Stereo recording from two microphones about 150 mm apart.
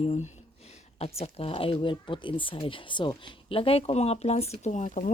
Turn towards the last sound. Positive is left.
turn(degrees=55)  # may be behind; listen again after turning